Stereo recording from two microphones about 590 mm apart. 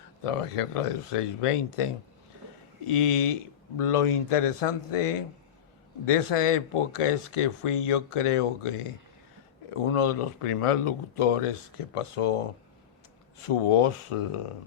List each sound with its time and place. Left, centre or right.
0.3 s speech: left
3.8 s speech: left
13.5 s speech: left